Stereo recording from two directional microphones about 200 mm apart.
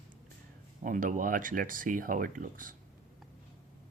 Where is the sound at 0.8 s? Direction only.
40° right (ahead or behind).